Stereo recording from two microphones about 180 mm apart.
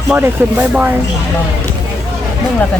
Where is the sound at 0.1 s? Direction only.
10° right (ahead or behind).